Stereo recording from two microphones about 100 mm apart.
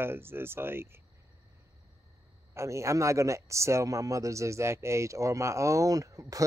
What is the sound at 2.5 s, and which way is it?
Speech, 30° right (ahead or behind).